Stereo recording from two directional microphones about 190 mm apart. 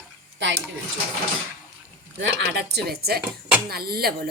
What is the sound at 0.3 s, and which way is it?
Speech, 70° right (ahead or behind).